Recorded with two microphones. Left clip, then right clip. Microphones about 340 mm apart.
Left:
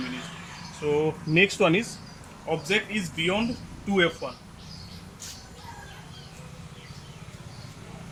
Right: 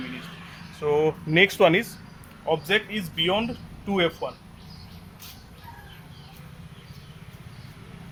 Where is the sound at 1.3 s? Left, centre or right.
Right.